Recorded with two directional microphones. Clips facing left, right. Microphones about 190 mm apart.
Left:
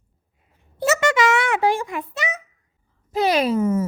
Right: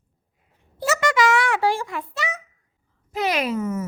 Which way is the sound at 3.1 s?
30° left (ahead or behind).